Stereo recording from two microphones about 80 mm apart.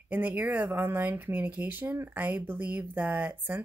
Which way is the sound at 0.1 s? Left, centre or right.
Right.